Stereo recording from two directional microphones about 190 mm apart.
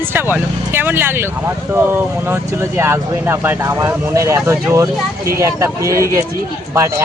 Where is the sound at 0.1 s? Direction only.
10° right (ahead or behind).